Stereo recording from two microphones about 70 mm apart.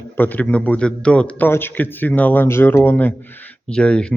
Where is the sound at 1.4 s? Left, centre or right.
Left.